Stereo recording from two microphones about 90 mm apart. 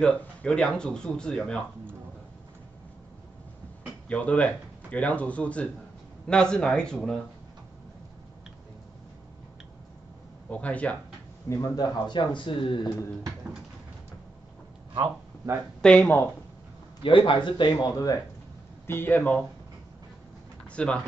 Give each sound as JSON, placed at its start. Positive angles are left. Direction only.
{"t": 0.0, "sound": "speech", "side_deg": 10}
{"t": 4.1, "sound": "speech", "side_deg": 15}
{"t": 10.5, "sound": "speech", "side_deg": 15}
{"t": 11.4, "sound": "speech", "side_deg": 35}
{"t": 15.8, "sound": "speech", "side_deg": 10}
{"t": 17.0, "sound": "speech", "side_deg": 70}
{"t": 18.9, "sound": "speech", "side_deg": 25}
{"t": 20.7, "sound": "speech", "side_deg": 10}